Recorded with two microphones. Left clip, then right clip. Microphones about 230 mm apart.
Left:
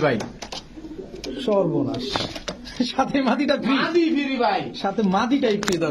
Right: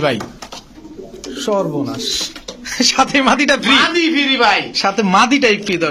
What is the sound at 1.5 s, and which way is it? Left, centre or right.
Speech, right.